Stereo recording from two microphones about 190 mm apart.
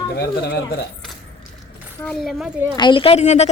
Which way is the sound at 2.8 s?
25° left (ahead or behind).